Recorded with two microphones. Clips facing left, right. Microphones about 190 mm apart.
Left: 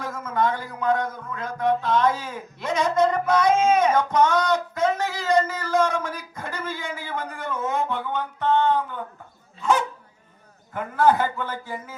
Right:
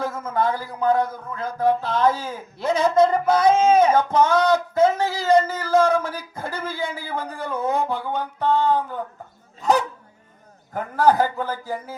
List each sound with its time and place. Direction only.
0.0 s a man's voice: 30° right (ahead or behind)